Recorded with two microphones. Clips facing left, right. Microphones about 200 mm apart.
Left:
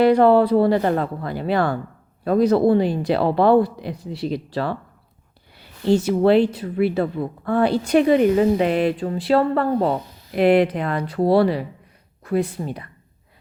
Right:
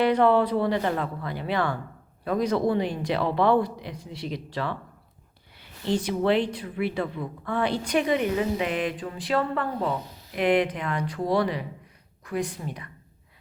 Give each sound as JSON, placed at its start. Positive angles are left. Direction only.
{"t": 0.0, "sound": "speech", "side_deg": 35}
{"t": 6.6, "sound": "speech", "side_deg": 40}